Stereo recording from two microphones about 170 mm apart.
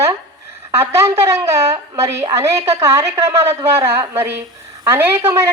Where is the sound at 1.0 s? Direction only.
15° right (ahead or behind).